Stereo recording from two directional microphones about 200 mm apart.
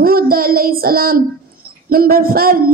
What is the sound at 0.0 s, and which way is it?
Child singing, 45° right (ahead or behind).